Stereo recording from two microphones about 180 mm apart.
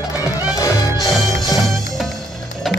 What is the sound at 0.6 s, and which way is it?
Music, 20° left (ahead or behind).